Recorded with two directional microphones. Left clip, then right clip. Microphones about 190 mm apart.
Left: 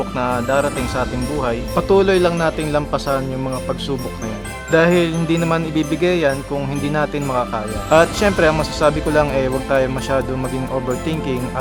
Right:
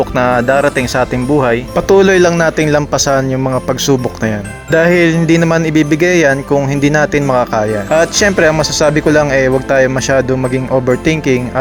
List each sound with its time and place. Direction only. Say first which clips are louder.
0.2 s speech: right 7 dB; 35° right (ahead or behind)